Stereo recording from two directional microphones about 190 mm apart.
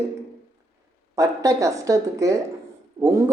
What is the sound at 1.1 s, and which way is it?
A woman's voice, 15° right (ahead or behind).